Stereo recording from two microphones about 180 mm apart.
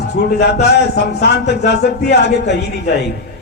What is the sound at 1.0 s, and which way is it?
Speech, 70° left (ahead or behind).